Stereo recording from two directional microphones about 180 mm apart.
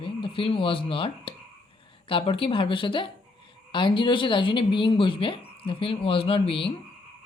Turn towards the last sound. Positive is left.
turn(degrees=30)  # may be behind; listen again after turning